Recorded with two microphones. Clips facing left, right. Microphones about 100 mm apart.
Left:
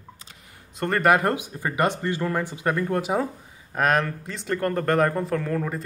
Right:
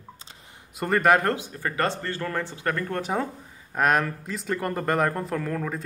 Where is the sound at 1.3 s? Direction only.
15° left (ahead or behind).